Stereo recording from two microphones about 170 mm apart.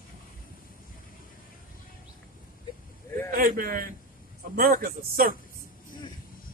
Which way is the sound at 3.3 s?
55° right (ahead or behind).